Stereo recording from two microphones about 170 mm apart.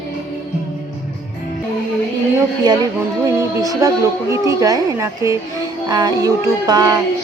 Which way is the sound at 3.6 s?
20° right (ahead or behind).